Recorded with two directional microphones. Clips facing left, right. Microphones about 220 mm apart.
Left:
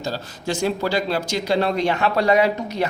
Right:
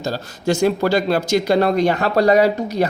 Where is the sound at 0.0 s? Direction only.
45° right (ahead or behind).